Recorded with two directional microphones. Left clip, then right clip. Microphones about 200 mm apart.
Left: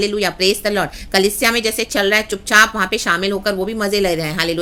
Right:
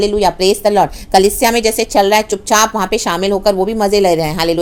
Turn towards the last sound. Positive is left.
turn(degrees=-5)  # may be behind; listen again after turning